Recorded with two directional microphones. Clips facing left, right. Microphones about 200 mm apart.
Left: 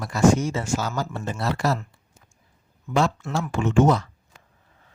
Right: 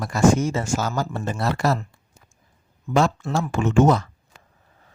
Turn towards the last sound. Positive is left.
turn(degrees=-45)  # may be behind; listen again after turning